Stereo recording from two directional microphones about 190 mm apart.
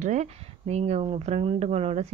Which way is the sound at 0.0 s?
35° right (ahead or behind).